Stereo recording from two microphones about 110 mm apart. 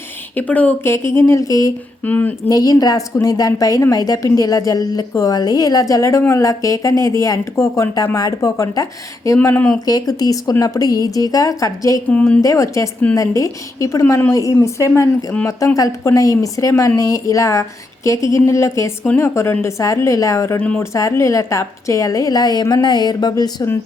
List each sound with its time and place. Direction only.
0.3 s speech: 15° left (ahead or behind)
0.9 s a woman's voice: 25° left (ahead or behind)
2.0 s speech: 15° left (ahead or behind)
2.5 s a woman's voice: 35° left (ahead or behind)
9.6 s speech: 5° left (ahead or behind)
9.8 s a woman's voice: 35° left (ahead or behind)
14.0 s a woman's voice: 20° left (ahead or behind); by 23.6 s 40° left (ahead or behind)